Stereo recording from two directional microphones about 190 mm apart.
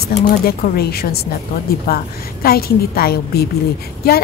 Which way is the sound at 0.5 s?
55° left (ahead or behind).